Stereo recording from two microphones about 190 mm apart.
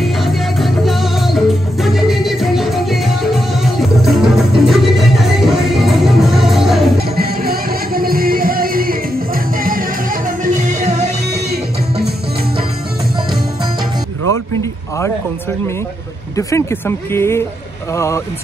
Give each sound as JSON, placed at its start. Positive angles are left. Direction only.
{"t": 0.0, "sound": "music", "side_deg": 0}
{"t": 7.0, "sound": "music", "side_deg": -55}
{"t": 14.6, "sound": "a sound", "side_deg": 15}
{"t": 16.3, "sound": "speech", "side_deg": 15}